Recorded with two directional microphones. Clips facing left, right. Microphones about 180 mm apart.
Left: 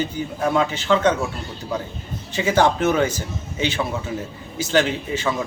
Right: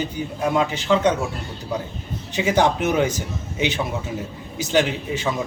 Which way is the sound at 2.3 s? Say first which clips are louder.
Left 1 dB; 15° right (ahead or behind).